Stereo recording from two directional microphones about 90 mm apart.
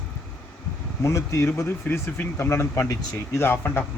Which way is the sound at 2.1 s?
30° left (ahead or behind).